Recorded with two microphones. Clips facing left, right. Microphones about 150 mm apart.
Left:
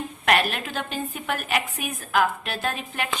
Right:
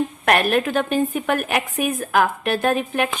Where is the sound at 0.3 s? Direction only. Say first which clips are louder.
Right 5 dB; 50° right (ahead or behind).